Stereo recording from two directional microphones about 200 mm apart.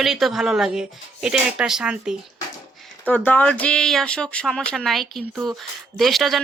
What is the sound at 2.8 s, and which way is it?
Speech, 5° left (ahead or behind).